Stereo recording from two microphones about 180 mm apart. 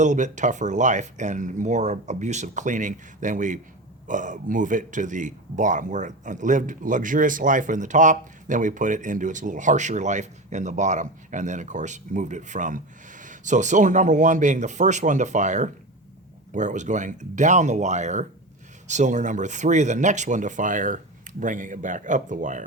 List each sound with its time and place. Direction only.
0.0 s speech: 45° right (ahead or behind)